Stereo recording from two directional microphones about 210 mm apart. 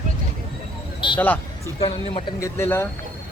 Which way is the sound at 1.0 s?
25° left (ahead or behind).